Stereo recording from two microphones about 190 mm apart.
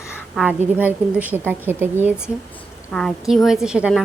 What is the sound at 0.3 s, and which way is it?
A woman's voice, 10° right (ahead or behind).